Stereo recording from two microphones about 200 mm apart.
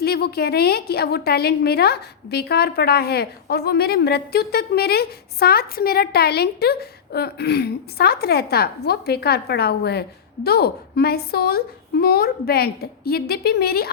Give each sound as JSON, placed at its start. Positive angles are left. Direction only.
{"t": 0.0, "sound": "a woman's voice", "side_deg": 50}